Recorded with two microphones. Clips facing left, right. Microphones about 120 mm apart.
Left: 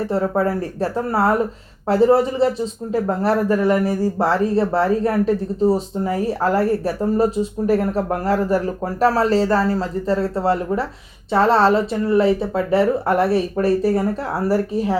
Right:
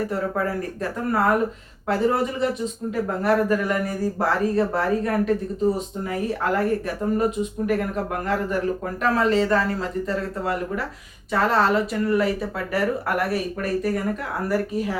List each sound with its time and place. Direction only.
0.1 s speech: 30° left (ahead or behind)